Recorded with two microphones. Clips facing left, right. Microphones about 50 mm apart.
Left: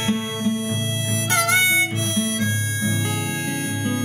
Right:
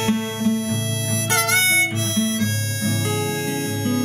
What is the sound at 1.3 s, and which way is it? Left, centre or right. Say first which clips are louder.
Harmonica: even; left.